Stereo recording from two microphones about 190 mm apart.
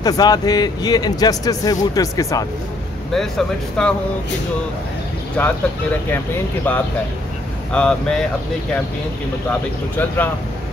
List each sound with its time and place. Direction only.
0.0 s speech: 20° left (ahead or behind)
3.1 s speech: centre (ahead or behind)
5.4 s speech: 10° left (ahead or behind)
9.5 s speech: 10° left (ahead or behind)